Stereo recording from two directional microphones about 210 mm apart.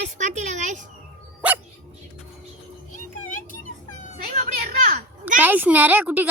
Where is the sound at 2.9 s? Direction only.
40° left (ahead or behind).